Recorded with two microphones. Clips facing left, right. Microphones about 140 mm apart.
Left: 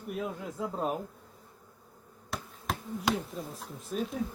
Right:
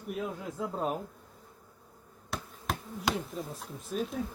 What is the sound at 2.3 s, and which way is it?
Speech, centre (ahead or behind).